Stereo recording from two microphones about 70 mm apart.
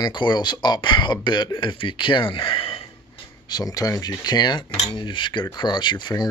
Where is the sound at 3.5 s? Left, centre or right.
Left.